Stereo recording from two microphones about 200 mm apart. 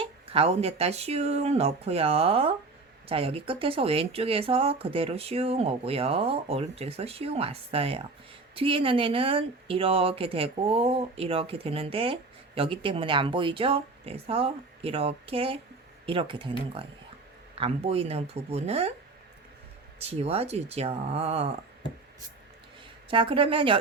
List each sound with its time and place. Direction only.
0.0 s speech: 30° right (ahead or behind)
20.0 s speech: 30° right (ahead or behind)
23.0 s speech: 25° right (ahead or behind)